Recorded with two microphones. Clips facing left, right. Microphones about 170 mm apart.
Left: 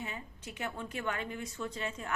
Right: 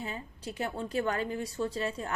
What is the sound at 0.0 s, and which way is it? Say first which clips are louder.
A woman's voice: right 4 dB; 30° right (ahead or behind).